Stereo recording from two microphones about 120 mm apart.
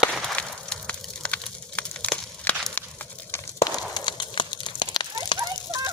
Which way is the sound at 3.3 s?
30° left (ahead or behind).